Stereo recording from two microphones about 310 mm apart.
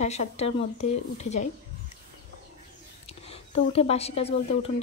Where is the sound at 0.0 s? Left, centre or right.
Left.